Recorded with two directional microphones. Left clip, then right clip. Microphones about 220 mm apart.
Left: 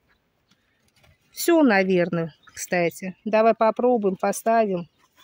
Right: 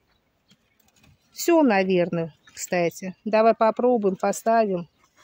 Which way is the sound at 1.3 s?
15° left (ahead or behind).